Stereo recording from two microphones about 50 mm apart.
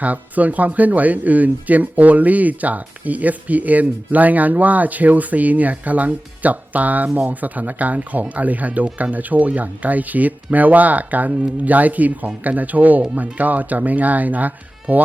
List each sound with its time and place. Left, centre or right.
0.0 s speech: right